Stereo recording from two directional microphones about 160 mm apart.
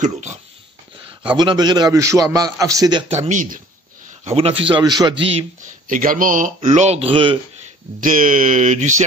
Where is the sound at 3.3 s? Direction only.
55° right (ahead or behind).